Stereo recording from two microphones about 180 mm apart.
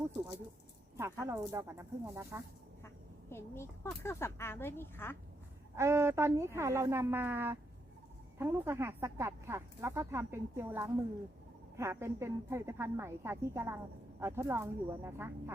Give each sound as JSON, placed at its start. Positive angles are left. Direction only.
{"t": 1.2, "sound": "speech", "side_deg": -15}
{"t": 2.8, "sound": "speech", "side_deg": 15}
{"t": 5.7, "sound": "speech", "side_deg": -15}